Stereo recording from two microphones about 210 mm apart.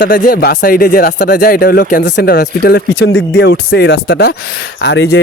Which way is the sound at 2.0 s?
55° left (ahead or behind).